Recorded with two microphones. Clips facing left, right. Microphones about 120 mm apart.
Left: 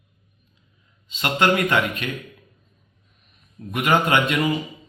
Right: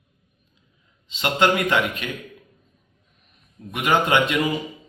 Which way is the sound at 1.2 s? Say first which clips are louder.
Even; 15° right (ahead or behind).